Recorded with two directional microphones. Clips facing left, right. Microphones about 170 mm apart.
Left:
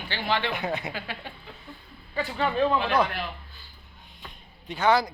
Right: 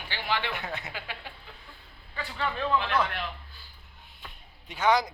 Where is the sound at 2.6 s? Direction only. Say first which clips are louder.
Left 2 dB; 35° left (ahead or behind).